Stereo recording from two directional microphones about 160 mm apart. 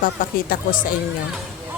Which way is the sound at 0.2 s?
60° left (ahead or behind).